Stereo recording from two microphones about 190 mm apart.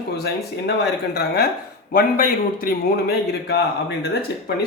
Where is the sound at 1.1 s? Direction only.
55° left (ahead or behind).